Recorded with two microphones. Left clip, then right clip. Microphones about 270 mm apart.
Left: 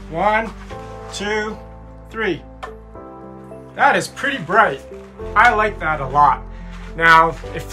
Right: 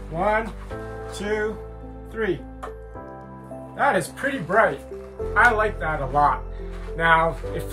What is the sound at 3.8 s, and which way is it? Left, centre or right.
Speech, centre.